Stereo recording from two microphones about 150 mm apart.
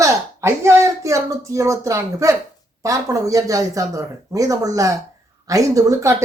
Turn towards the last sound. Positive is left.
turn(degrees=-20)  # may be behind; listen again after turning